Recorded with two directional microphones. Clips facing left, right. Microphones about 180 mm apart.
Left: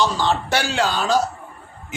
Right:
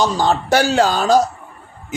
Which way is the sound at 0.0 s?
45° right (ahead or behind).